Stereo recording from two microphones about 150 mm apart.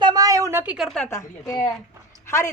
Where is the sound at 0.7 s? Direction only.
Centre (ahead or behind).